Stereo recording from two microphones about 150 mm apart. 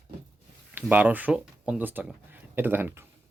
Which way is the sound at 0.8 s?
10° right (ahead or behind).